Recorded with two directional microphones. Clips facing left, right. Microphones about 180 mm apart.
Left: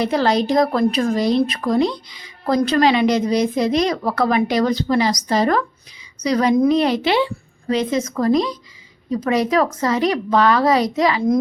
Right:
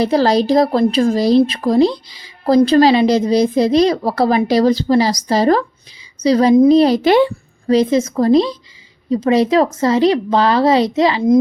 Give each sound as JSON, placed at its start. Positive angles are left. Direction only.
{"t": 0.0, "sound": "speech", "side_deg": -35}
{"t": 7.7, "sound": "a woman's voice", "side_deg": -35}